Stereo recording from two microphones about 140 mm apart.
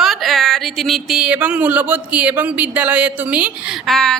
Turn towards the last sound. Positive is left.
turn(degrees=5)  # may be behind; listen again after turning